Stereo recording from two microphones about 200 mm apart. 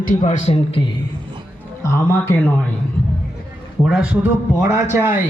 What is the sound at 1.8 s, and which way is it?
Speech, 15° left (ahead or behind).